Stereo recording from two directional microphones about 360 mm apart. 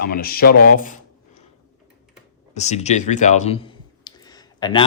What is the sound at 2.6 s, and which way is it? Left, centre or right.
Speech, centre.